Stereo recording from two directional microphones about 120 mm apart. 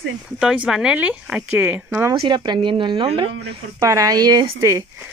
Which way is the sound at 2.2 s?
40° right (ahead or behind).